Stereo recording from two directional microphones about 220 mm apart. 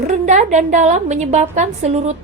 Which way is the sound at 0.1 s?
35° right (ahead or behind).